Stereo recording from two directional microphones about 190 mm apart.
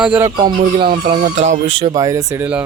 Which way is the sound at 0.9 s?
60° right (ahead or behind).